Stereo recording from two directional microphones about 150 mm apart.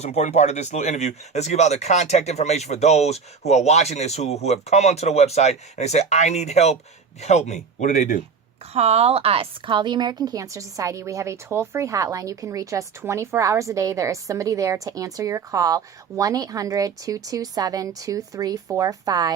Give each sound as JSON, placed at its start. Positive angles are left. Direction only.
{"t": 0.0, "sound": "speech", "side_deg": 50}
{"t": 8.7, "sound": "a woman's voice", "side_deg": -45}